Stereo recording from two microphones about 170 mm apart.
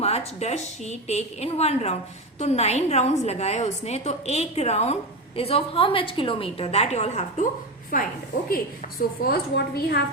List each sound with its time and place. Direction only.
0.0 s a woman's voice: 35° left (ahead or behind)
7.9 s a woman's voice: 55° left (ahead or behind)